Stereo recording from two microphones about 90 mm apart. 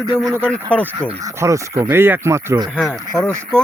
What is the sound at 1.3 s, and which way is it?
Speech, 35° right (ahead or behind).